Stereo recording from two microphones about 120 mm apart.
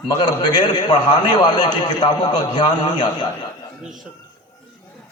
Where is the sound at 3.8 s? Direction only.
Centre (ahead or behind).